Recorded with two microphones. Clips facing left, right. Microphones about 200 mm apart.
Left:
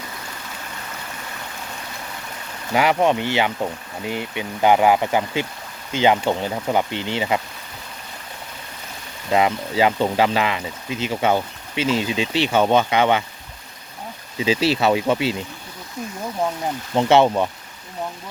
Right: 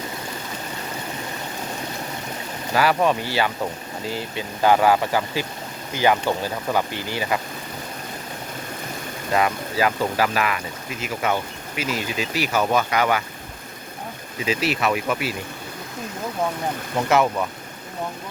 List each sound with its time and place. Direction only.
2.7 s speech: 20° left (ahead or behind)
9.3 s speech: 25° left (ahead or behind)
14.3 s speech: 30° left (ahead or behind)
16.9 s speech: 30° left (ahead or behind)